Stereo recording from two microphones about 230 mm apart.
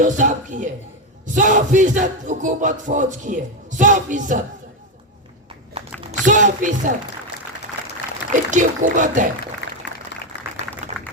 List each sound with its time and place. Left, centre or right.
0.0 s music: right
6.0 s speech: right
8.3 s music: right
9.6 s a sound: left